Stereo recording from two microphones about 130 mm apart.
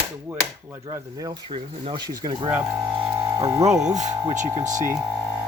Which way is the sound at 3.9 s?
65° right (ahead or behind).